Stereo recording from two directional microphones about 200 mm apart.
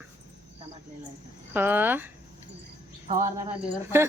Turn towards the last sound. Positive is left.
turn(degrees=-15)  # may be behind; listen again after turning